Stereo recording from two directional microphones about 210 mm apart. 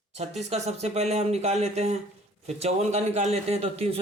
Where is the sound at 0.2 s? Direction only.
30° right (ahead or behind).